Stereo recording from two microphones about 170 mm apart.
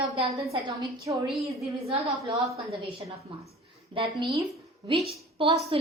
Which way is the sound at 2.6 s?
35° right (ahead or behind).